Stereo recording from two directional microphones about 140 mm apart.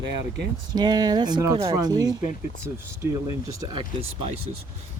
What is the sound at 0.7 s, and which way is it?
Speech, 30° right (ahead or behind).